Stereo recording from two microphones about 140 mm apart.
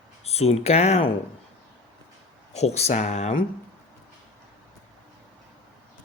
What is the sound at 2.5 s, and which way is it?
Speech, 50° left (ahead or behind).